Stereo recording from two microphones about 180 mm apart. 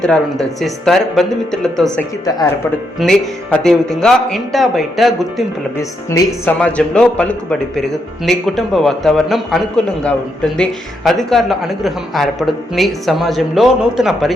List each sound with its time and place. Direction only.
0.0 s a man's voice: 5° left (ahead or behind)
5.7 s a man's voice: 15° left (ahead or behind); by 14.3 s centre (ahead or behind)